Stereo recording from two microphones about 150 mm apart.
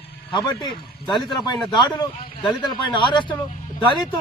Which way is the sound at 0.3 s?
30° left (ahead or behind).